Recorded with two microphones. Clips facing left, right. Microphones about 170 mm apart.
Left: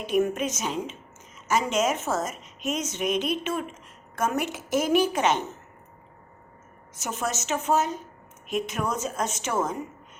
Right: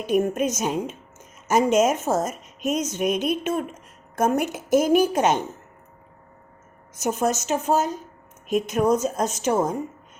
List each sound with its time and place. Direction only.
0.0 s a woman's voice: 45° right (ahead or behind)
7.0 s a woman's voice: 45° right (ahead or behind)